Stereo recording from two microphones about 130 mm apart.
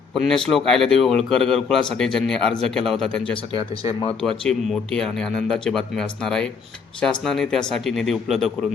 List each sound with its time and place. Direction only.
0.1 s speech: centre (ahead or behind)
3.5 s speech: 45° left (ahead or behind)
4.2 s speech: 5° left (ahead or behind)